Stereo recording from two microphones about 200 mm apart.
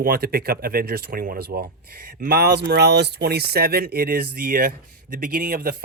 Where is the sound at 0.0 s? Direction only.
45° right (ahead or behind).